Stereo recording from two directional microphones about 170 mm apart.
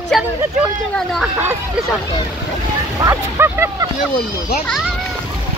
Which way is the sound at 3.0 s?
15° right (ahead or behind).